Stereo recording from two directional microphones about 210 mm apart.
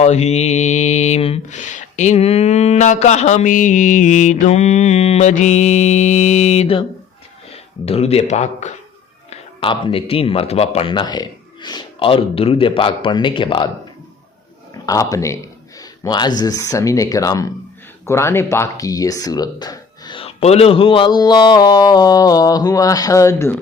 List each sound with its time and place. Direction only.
0.0 s mantra: 30° left (ahead or behind)
7.5 s speech: 30° left (ahead or behind)
14.8 s speech: 15° left (ahead or behind)
15.8 s a sound: 20° left (ahead or behind)
16.4 s speech: 15° left (ahead or behind)